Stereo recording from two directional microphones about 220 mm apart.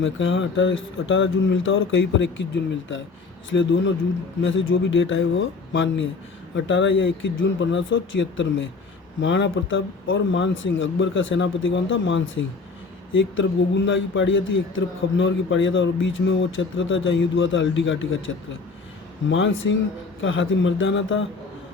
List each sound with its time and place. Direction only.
0.0 s a man's voice: 60° left (ahead or behind)
3.5 s a man's voice: 55° left (ahead or behind)
19.3 s a man's voice: 60° left (ahead or behind)